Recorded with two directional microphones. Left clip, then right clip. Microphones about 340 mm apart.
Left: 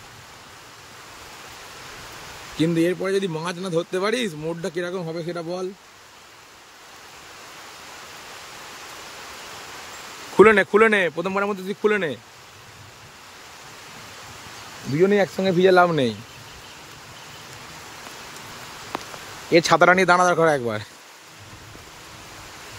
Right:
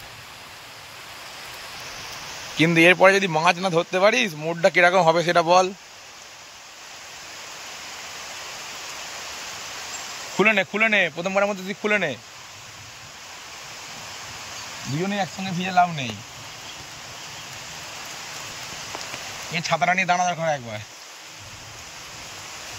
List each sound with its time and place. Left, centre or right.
2.5 s a man's voice: centre
5.1 s speech: centre
10.3 s speech: centre
15.0 s speech: centre
19.5 s speech: centre